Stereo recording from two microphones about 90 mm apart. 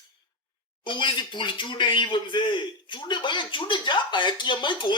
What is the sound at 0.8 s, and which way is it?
A man's voice, 60° left (ahead or behind).